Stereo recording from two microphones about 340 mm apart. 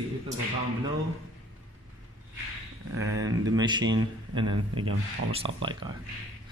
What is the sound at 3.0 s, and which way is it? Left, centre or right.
A man's voice, centre.